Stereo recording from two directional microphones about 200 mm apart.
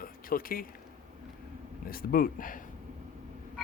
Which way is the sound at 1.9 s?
45° left (ahead or behind).